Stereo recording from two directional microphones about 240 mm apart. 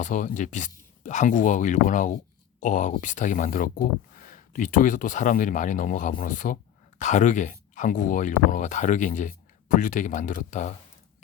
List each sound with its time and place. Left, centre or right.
0.0 s speech: left